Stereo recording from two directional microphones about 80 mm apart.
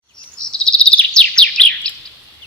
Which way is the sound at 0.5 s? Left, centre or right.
Centre.